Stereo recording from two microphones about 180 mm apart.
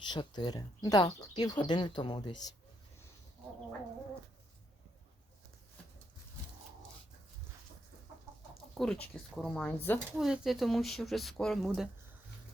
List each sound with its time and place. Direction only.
0.1 s speech: 25° left (ahead or behind)
8.8 s speech: 5° left (ahead or behind)
10.2 s speech: centre (ahead or behind)